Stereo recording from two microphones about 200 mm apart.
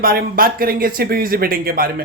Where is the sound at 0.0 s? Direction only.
45° right (ahead or behind).